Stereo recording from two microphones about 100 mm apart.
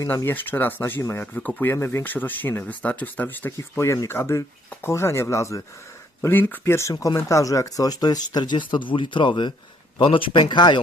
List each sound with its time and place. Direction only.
0.1 s speech: 20° left (ahead or behind)
6.2 s speech: 20° left (ahead or behind)
6.9 s speech: 40° left (ahead or behind)